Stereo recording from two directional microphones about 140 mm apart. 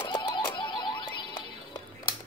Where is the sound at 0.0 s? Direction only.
35° left (ahead or behind).